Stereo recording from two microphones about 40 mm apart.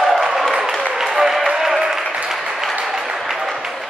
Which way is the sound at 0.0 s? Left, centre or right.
Centre.